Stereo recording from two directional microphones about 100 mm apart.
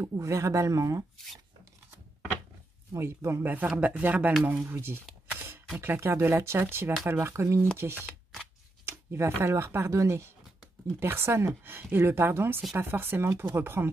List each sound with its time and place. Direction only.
0.0 s speech: 30° right (ahead or behind)
1.1 s speech: centre (ahead or behind)
2.9 s speech: 25° right (ahead or behind)
3.5 s speech: 15° right (ahead or behind)
5.3 s camera: 20° right (ahead or behind)
5.8 s speech: 25° right (ahead or behind)